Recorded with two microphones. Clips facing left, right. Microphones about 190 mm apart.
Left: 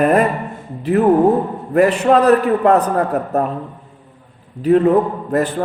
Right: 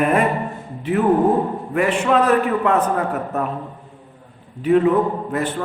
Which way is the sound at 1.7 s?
40° left (ahead or behind).